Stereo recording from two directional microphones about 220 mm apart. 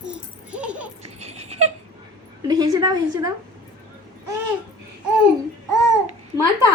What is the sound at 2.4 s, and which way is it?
Speech, 15° right (ahead or behind).